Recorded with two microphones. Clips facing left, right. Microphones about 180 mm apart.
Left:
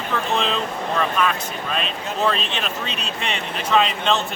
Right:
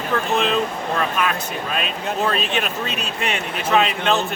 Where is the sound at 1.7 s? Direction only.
5° right (ahead or behind).